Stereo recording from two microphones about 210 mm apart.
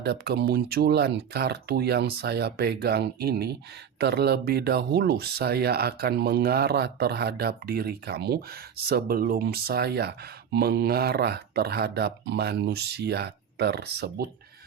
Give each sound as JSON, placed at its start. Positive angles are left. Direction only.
{"t": 0.0, "sound": "speech", "side_deg": -50}